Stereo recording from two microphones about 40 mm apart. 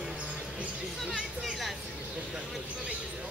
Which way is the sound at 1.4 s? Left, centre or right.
Centre.